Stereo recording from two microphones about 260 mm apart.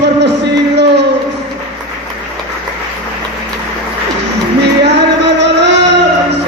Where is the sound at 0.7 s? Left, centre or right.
Right.